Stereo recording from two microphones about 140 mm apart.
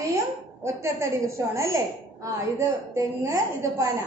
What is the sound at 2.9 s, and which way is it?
A woman's voice, 25° right (ahead or behind).